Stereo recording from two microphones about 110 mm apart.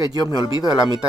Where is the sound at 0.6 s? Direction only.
35° left (ahead or behind).